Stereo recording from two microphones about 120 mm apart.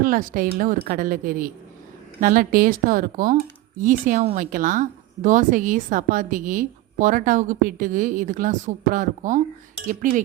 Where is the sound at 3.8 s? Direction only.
90° right.